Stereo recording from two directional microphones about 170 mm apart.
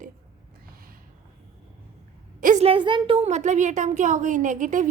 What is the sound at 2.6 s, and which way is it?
A woman's voice, 30° right (ahead or behind).